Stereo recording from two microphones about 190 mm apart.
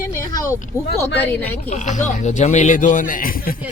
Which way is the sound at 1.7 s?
40° left (ahead or behind).